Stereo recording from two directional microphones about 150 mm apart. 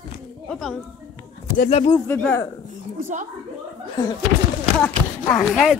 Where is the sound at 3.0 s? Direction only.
55° right (ahead or behind).